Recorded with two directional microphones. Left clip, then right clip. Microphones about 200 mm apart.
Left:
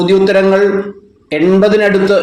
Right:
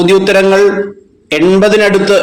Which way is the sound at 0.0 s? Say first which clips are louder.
Right 2 dB; 25° right (ahead or behind).